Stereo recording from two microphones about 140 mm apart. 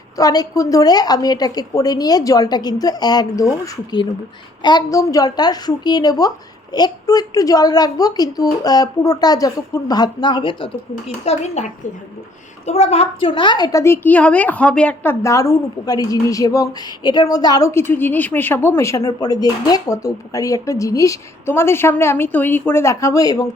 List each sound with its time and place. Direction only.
0.2 s a woman's voice: 25° left (ahead or behind)
4.6 s a woman's voice: 30° left (ahead or behind)
11.3 s a woman's voice: 55° left (ahead or behind); by 15.1 s 10° left (ahead or behind)
15.2 s a woman's voice: 20° left (ahead or behind)